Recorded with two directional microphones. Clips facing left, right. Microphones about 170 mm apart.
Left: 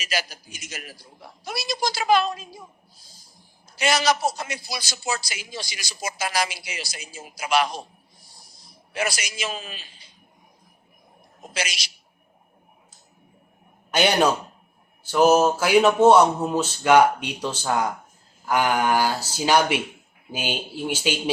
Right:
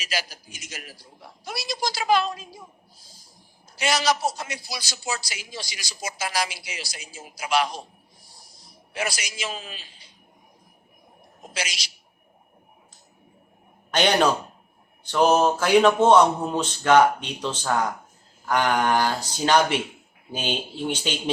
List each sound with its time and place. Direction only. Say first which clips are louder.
0.0 s a man's voice: left 2 dB; 55° left (ahead or behind)
3.8 s a man's voice: left 2 dB; 55° left (ahead or behind)
8.9 s a man's voice: left 2 dB; 55° left (ahead or behind)
11.5 s a man's voice: left 2 dB; 60° left (ahead or behind)
13.9 s speech: even; 10° left (ahead or behind)